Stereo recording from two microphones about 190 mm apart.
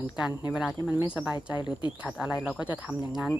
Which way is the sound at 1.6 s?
25° left (ahead or behind).